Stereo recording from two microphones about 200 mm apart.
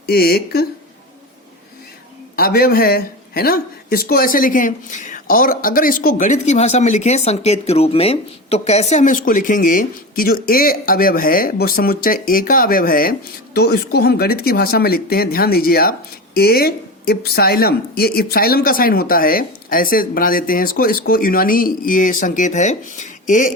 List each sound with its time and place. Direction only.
0.1 s speech: 50° left (ahead or behind)
2.3 s speech: 50° left (ahead or behind)